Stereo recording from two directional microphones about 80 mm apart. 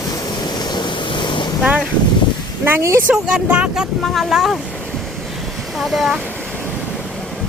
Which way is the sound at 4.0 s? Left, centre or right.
Centre.